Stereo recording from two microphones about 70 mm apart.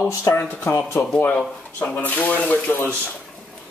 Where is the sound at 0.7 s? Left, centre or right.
Left.